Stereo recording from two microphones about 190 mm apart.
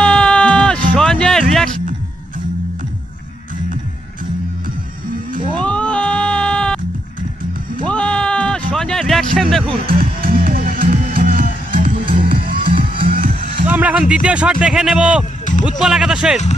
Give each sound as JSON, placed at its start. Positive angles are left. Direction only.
{"t": 0.0, "sound": "music", "side_deg": 5}
{"t": 5.6, "sound": "music", "side_deg": 5}
{"t": 7.8, "sound": "music", "side_deg": 5}
{"t": 9.9, "sound": "music", "side_deg": -50}
{"t": 13.7, "sound": "music", "side_deg": -10}
{"t": 14.2, "sound": "speech", "side_deg": -5}